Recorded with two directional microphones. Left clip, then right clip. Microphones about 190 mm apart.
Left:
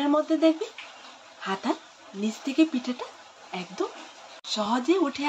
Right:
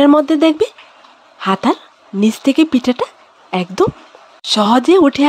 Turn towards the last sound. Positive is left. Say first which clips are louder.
# right 14 dB
turn(degrees=-70)  # may be behind; listen again after turning